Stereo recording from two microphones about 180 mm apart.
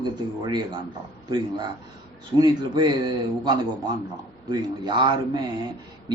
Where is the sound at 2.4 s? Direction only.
25° right (ahead or behind).